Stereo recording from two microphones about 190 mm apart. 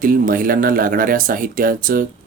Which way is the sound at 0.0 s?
45° right (ahead or behind).